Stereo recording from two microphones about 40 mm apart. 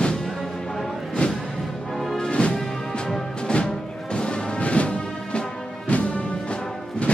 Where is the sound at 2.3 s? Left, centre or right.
Left.